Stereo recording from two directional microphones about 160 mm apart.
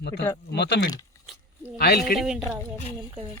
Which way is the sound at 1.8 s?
80° left.